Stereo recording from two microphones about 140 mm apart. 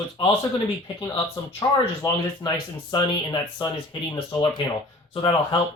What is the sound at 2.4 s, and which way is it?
Speech, 30° left (ahead or behind).